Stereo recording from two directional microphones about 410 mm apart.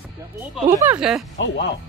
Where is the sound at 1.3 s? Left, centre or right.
Left.